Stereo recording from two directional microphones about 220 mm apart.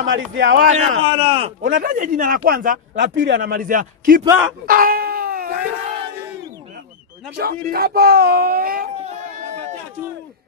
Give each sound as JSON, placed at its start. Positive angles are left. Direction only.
{"t": 0.0, "sound": "speech", "side_deg": -60}
{"t": 0.6, "sound": "speech", "side_deg": -35}
{"t": 1.7, "sound": "a man's voice", "side_deg": -40}
{"t": 3.0, "sound": "a man's voice", "side_deg": -55}
{"t": 4.6, "sound": "a sound", "side_deg": -40}
{"t": 7.3, "sound": "speech", "side_deg": -45}